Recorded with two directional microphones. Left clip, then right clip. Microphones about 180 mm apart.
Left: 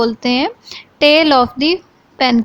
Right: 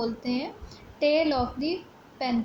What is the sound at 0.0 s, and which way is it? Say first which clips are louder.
A woman's voice: left 15 dB; 40° left (ahead or behind).